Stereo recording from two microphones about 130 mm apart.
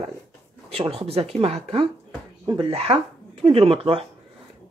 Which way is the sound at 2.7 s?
50° right (ahead or behind).